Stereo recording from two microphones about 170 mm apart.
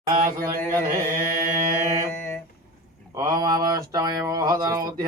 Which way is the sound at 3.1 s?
20° right (ahead or behind).